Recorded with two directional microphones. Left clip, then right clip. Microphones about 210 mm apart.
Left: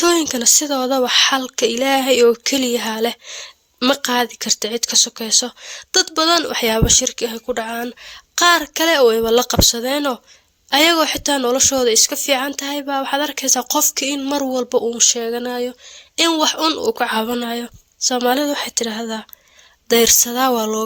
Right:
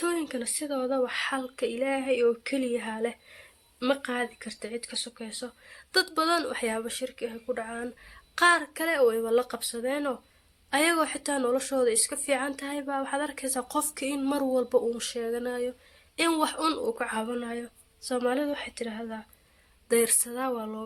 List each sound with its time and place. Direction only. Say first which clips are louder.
0.0 s a woman's voice: left 15 dB; 50° left (ahead or behind); by 16.9 s 35° left (ahead or behind)
17.0 s speech: left 12 dB; 50° left (ahead or behind)